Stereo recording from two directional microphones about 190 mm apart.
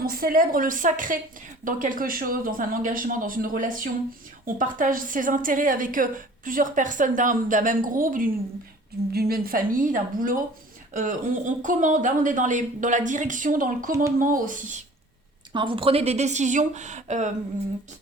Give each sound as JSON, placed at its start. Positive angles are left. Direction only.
{"t": 0.0, "sound": "a woman's voice", "side_deg": -50}
{"t": 15.5, "sound": "speech", "side_deg": -25}